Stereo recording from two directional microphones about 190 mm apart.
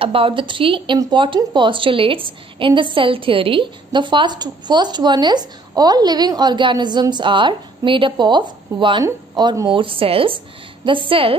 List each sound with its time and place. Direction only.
0.0 s speech: 30° right (ahead or behind)